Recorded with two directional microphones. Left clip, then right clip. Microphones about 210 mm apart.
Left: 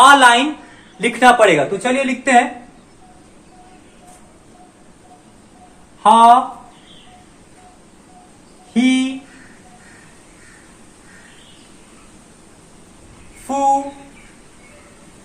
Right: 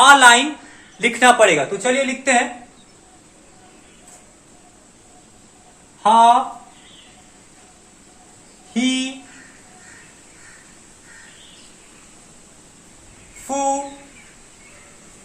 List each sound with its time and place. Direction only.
0.0 s a woman's voice: 15° right (ahead or behind)
6.0 s speech: 15° right (ahead or behind)
8.7 s speech: 10° right (ahead or behind)
13.5 s speech: 10° right (ahead or behind)